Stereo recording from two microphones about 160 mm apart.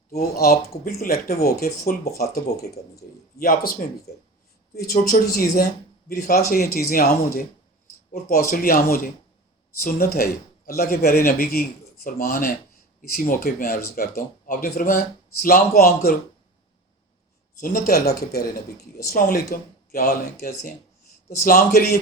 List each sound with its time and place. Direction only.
0.1 s speech: 70° left (ahead or behind)
17.6 s speech: 60° left (ahead or behind)